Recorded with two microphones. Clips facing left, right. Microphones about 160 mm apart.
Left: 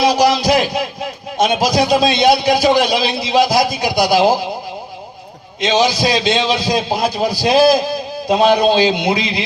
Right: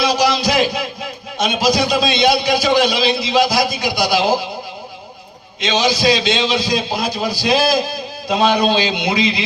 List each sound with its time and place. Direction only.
0.0 s a sound: 50° left (ahead or behind)
1.4 s a man's voice: 50° left (ahead or behind)
5.5 s a man's voice: 50° left (ahead or behind)